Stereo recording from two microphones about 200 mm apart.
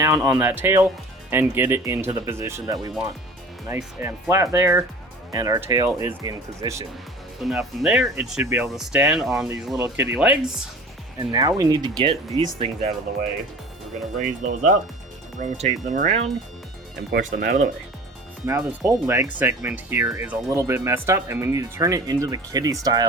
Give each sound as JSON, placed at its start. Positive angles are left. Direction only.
{"t": 0.2, "sound": "speech", "side_deg": -5}
{"t": 7.4, "sound": "speech", "side_deg": 0}
{"t": 11.2, "sound": "speech", "side_deg": -20}
{"t": 14.2, "sound": "speech", "side_deg": -40}
{"t": 18.8, "sound": "speech", "side_deg": -15}